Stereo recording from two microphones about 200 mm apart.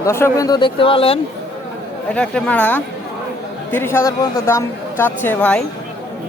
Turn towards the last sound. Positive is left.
turn(degrees=10)  # may be behind; listen again after turning